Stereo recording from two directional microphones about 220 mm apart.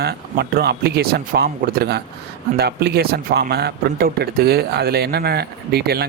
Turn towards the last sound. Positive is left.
turn(degrees=-45)  # may be behind; listen again after turning